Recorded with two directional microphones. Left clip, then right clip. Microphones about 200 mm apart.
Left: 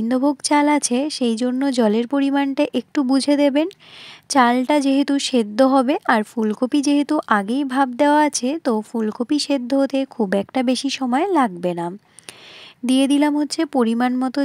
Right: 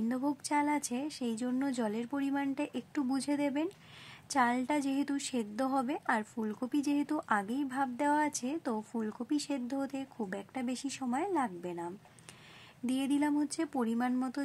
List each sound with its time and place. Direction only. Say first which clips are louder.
0.1 s speech: left 17 dB; 35° left (ahead or behind)